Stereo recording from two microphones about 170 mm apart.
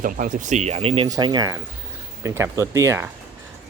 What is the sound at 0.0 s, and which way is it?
Speech, 50° right (ahead or behind).